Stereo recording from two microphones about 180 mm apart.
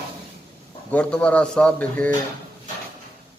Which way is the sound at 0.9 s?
5° left (ahead or behind).